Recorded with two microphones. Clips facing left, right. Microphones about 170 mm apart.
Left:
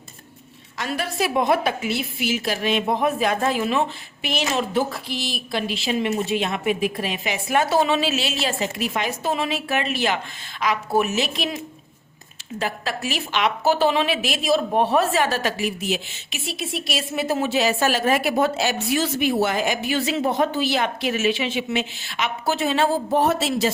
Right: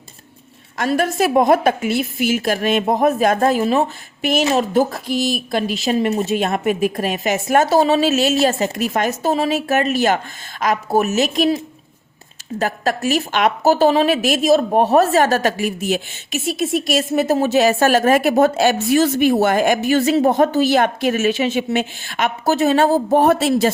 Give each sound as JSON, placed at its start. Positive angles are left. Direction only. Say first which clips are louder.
{"t": 0.8, "sound": "a woman's voice", "louder": "right 7 dB", "side_deg": -50}